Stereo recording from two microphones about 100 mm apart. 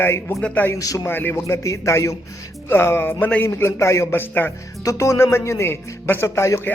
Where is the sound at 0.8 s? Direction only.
35° left (ahead or behind).